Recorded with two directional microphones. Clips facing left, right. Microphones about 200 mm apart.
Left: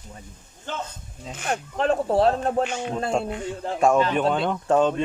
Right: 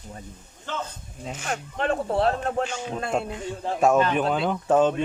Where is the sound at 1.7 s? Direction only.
40° left (ahead or behind).